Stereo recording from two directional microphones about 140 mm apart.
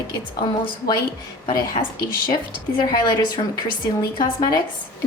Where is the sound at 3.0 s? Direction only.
30° left (ahead or behind).